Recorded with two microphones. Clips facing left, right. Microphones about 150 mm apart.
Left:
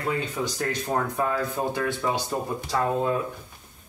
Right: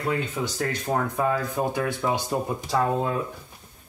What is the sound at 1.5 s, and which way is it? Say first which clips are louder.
Speech: right 1 dB; 15° right (ahead or behind).